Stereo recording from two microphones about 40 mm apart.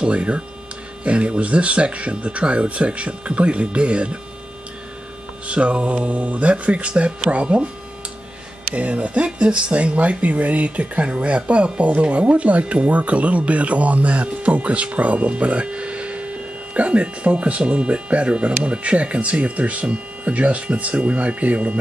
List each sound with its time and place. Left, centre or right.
0.0 s speech: right
5.5 s speech: right
8.7 s speech: right